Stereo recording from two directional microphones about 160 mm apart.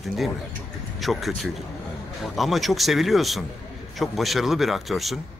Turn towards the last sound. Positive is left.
turn(degrees=0)  # may be behind; listen again after turning